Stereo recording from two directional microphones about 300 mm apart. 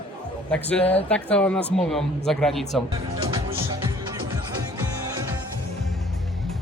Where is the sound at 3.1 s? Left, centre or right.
Centre.